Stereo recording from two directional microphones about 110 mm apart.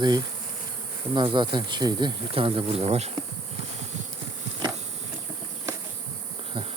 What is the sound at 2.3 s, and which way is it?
Speech, 55° right (ahead or behind).